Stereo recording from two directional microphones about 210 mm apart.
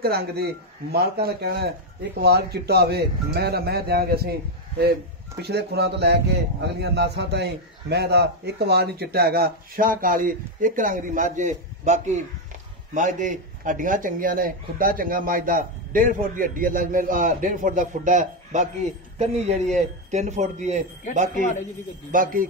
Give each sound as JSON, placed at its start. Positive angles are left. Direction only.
{"t": 0.0, "sound": "speech", "side_deg": -50}
{"t": 5.4, "sound": "a man's voice", "side_deg": -50}
{"t": 22.1, "sound": "a man's voice", "side_deg": -40}